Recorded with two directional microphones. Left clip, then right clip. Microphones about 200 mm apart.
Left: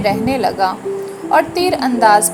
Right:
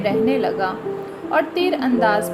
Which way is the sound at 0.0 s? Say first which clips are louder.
Left 3 dB; 20° left (ahead or behind).